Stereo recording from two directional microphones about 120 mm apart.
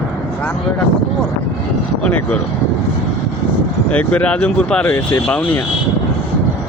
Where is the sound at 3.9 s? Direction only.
10° left (ahead or behind).